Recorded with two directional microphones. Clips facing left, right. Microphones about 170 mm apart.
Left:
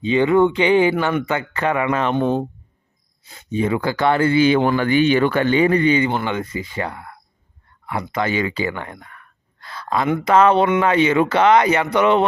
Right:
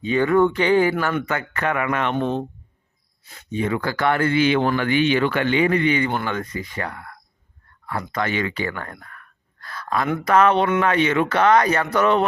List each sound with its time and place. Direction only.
0.0 s speech: 20° left (ahead or behind)
9.6 s a sound: 25° left (ahead or behind)
10.2 s speech: 25° left (ahead or behind)